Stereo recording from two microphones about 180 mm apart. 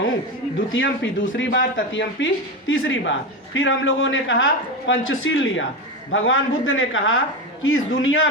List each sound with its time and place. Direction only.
0.7 s speech: 90° left